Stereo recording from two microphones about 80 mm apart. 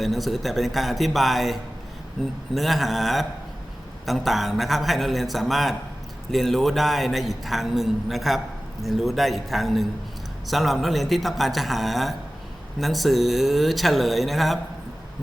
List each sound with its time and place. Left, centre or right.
0.0 s a man's voice: centre